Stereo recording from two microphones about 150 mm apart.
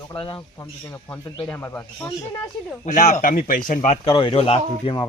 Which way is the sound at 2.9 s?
55° left (ahead or behind).